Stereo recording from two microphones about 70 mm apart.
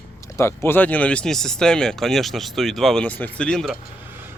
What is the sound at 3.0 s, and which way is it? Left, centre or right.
Speech, left.